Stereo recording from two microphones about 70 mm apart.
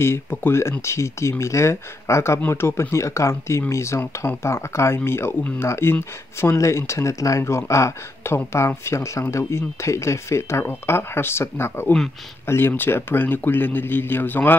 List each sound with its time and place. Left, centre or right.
0.0 s speech: left